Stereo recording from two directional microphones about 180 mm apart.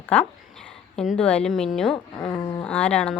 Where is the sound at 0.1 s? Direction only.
5° left (ahead or behind).